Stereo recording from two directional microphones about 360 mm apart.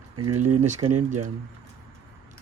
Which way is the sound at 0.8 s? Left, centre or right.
Centre.